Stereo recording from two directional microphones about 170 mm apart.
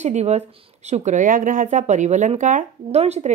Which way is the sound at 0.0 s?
40° right (ahead or behind).